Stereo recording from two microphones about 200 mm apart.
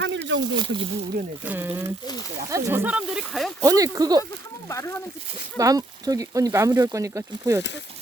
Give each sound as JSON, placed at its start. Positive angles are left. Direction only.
{"t": 0.0, "sound": "a sound", "side_deg": -65}
{"t": 0.5, "sound": "speech", "side_deg": -25}
{"t": 1.5, "sound": "speech", "side_deg": -10}
{"t": 3.6, "sound": "speech", "side_deg": -15}
{"t": 4.7, "sound": "speech", "side_deg": 15}
{"t": 5.5, "sound": "speech", "side_deg": -15}